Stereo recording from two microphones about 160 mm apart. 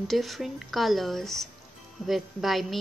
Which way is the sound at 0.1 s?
Centre (ahead or behind).